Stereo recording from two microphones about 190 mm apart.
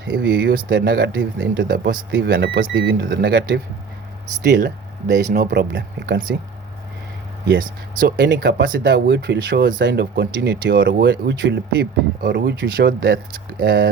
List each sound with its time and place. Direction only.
0.0 s speech: 65° right (ahead or behind)
2.1 s speech: 70° right (ahead or behind); by 6.3 s 50° right (ahead or behind)
7.9 s speech: 60° right (ahead or behind)
12.2 s speech: 55° right (ahead or behind)